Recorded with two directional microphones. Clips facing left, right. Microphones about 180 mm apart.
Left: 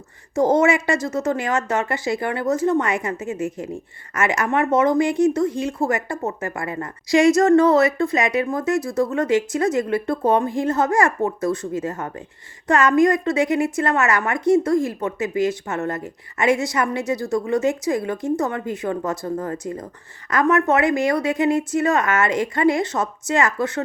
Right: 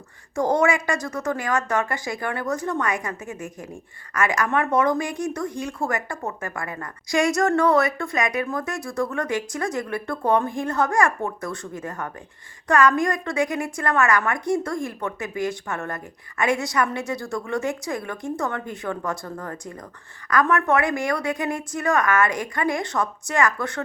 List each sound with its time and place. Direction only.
0.3 s a woman's voice: 20° left (ahead or behind)